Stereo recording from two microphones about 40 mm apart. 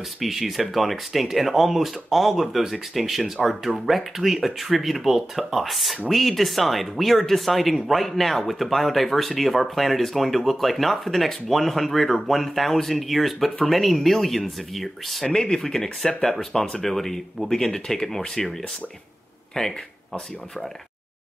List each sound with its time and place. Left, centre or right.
0.2 s speech: centre
19.6 s speech: left